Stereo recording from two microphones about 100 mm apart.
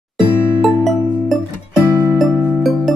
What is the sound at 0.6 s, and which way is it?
Music, centre (ahead or behind).